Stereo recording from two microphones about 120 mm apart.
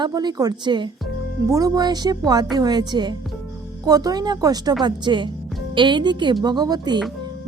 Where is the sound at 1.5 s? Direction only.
30° right (ahead or behind).